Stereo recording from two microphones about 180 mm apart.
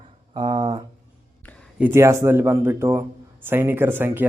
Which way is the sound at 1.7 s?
10° right (ahead or behind).